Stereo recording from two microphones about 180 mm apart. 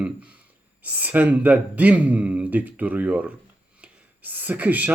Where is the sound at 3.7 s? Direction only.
10° right (ahead or behind).